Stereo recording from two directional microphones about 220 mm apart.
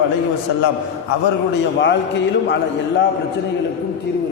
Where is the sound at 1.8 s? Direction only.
55° left (ahead or behind).